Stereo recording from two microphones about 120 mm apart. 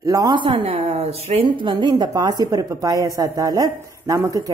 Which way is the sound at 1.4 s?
40° right (ahead or behind).